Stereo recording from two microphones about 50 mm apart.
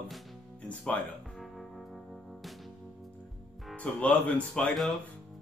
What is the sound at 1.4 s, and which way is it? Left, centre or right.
Music, centre.